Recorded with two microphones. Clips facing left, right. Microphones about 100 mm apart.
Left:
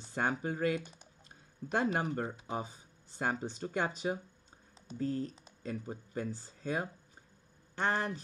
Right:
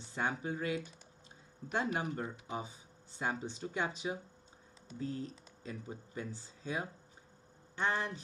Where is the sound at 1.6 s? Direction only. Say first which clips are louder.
Left 4 dB; 30° right (ahead or behind).